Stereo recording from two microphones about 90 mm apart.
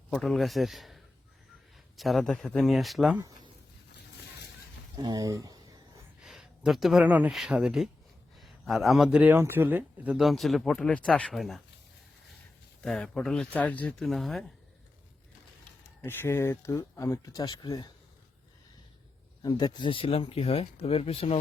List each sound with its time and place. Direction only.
0.1 s speech: centre (ahead or behind)
4.9 s speech: 45° right (ahead or behind)
6.2 s a sound: 5° right (ahead or behind)
7.0 s speech: 15° right (ahead or behind)
7.3 s speech: 5° right (ahead or behind)
8.4 s a sound: centre (ahead or behind)
9.0 s speech: 10° right (ahead or behind)
9.3 s speech: 25° right (ahead or behind)
10.2 s speech: centre (ahead or behind)
12.8 s speech: 5° left (ahead or behind)
13.5 s speech: 15° left (ahead or behind)
16.0 s speech: 25° left (ahead or behind); by 17.8 s 50° left (ahead or behind)
19.4 s speech: 45° left (ahead or behind); by 21.3 s 90° left